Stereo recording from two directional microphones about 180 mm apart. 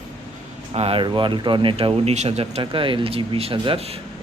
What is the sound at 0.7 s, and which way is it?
Speech, 35° right (ahead or behind).